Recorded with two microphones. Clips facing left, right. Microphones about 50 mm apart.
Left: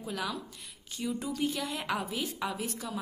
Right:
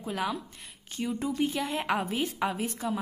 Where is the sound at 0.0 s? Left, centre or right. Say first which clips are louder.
Right 4 dB; right.